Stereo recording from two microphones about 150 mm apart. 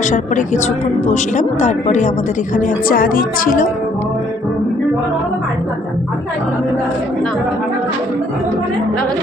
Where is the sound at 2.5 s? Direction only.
65° left (ahead or behind).